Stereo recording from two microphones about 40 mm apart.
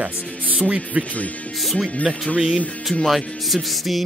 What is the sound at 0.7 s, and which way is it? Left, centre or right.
Speech, right.